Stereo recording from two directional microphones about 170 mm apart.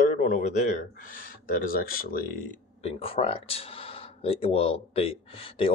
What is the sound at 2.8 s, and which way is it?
Speech, 35° left (ahead or behind).